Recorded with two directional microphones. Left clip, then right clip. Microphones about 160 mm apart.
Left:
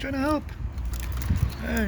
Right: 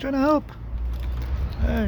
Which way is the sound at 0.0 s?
20° right (ahead or behind).